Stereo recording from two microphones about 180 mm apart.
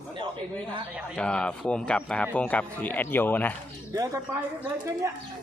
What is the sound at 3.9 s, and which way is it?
Speech, 15° right (ahead or behind).